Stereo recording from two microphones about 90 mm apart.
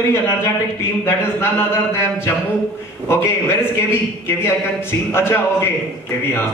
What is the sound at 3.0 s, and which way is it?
A man's voice, 30° left (ahead or behind).